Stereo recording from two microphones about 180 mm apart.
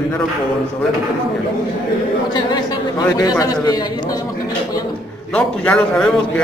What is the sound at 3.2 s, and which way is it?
Speech, 20° left (ahead or behind).